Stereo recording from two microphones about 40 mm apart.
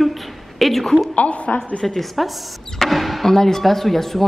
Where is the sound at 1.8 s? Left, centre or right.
Centre.